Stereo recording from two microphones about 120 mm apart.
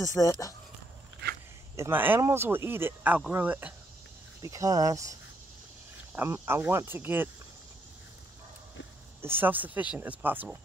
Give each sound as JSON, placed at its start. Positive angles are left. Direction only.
{"t": 0.0, "sound": "speech", "side_deg": 25}
{"t": 1.8, "sound": "speech", "side_deg": -15}
{"t": 4.4, "sound": "speech", "side_deg": -30}
{"t": 6.1, "sound": "speech", "side_deg": -20}
{"t": 9.2, "sound": "speech", "side_deg": -15}